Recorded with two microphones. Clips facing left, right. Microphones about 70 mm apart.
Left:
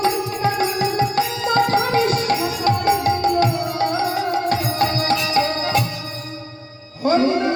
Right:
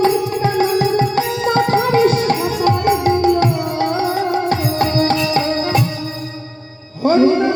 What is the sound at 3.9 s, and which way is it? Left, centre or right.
Music, right.